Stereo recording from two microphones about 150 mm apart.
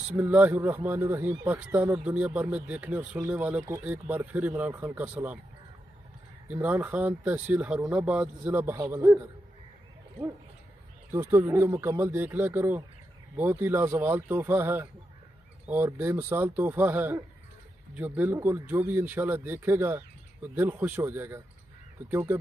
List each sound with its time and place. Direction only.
0.1 s speech: 10° right (ahead or behind)
6.4 s speech: 10° right (ahead or behind)
11.1 s speech: 15° right (ahead or behind)